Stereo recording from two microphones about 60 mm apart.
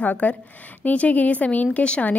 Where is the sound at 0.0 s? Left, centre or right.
Left.